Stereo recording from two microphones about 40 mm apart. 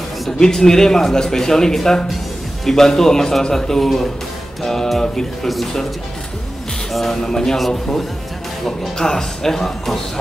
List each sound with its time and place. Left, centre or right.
0.4 s a man's voice: centre
6.9 s a man's voice: centre